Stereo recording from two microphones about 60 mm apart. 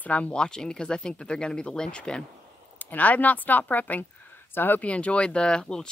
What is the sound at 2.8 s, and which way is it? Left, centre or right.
Speech, left.